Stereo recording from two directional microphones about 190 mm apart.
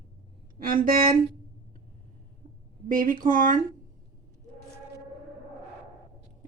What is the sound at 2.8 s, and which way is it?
Speech, 45° right (ahead or behind).